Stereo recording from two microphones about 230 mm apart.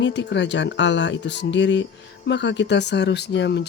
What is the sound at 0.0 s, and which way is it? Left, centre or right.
Speech, left.